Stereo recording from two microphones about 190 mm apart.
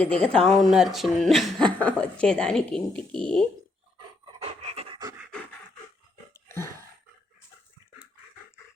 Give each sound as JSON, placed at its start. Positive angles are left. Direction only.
{"t": 0.0, "sound": "speech", "side_deg": 5}
{"t": 4.4, "sound": "pant", "side_deg": -35}
{"t": 6.3, "sound": "dog", "side_deg": 15}